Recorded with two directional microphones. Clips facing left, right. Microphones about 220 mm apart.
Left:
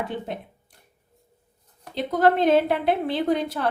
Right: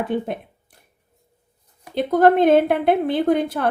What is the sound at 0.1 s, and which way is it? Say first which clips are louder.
Speech: right 8 dB; 55° right (ahead or behind).